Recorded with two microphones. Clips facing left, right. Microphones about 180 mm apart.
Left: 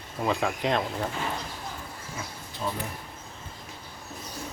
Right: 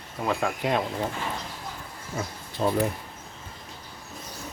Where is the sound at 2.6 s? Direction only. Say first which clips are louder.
Right 7 dB; 65° right (ahead or behind).